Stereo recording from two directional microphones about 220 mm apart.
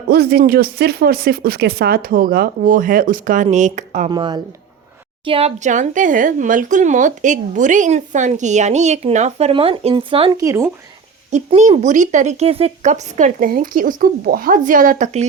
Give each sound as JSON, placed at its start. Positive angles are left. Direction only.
{"t": 0.1, "sound": "speech", "side_deg": -45}
{"t": 4.1, "sound": "speech", "side_deg": -20}
{"t": 10.4, "sound": "speech", "side_deg": -10}
{"t": 11.3, "sound": "speech", "side_deg": -30}